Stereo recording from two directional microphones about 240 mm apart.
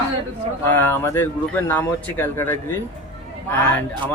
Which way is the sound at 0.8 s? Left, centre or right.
Centre.